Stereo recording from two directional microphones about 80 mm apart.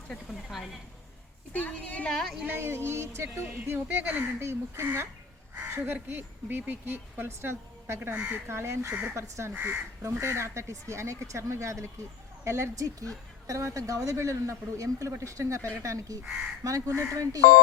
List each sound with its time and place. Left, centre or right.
0.1 s speech: centre
1.5 s a woman's voice: centre
2.4 s speech: right
4.4 s speech: right
8.1 s speech: centre
8.4 s speech: right